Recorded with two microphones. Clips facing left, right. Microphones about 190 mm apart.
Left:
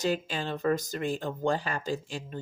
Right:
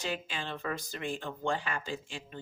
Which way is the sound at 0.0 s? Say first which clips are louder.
Left 7 dB; 40° left (ahead or behind).